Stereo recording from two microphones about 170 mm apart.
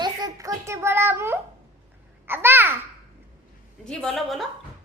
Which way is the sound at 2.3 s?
10° right (ahead or behind).